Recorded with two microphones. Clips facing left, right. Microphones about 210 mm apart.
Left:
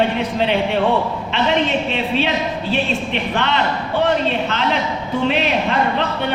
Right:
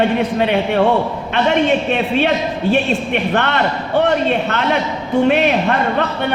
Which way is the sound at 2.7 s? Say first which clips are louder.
Right 4 dB; 55° right (ahead or behind).